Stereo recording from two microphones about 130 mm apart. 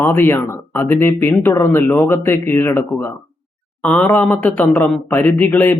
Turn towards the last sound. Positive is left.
turn(degrees=15)  # may be behind; listen again after turning